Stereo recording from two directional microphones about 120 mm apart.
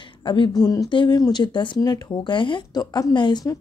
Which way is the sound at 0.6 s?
35° left (ahead or behind).